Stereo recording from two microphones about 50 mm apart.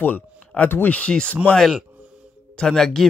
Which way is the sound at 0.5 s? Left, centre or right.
Left.